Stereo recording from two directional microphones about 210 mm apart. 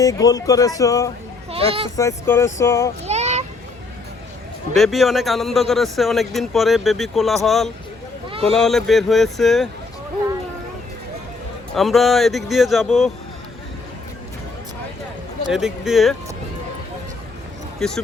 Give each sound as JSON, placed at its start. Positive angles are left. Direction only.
{"t": 0.0, "sound": "speech", "side_deg": 15}
{"t": 1.5, "sound": "a child's voice", "side_deg": -25}
{"t": 2.0, "sound": "speech", "side_deg": 15}
{"t": 3.1, "sound": "a sound", "side_deg": -30}
{"t": 4.7, "sound": "speech", "side_deg": 0}
{"t": 8.3, "sound": "a sound", "side_deg": -25}
{"t": 8.5, "sound": "speech", "side_deg": 0}
{"t": 11.7, "sound": "speech", "side_deg": 0}
{"t": 15.4, "sound": "speech", "side_deg": 0}
{"t": 17.7, "sound": "speech", "side_deg": 0}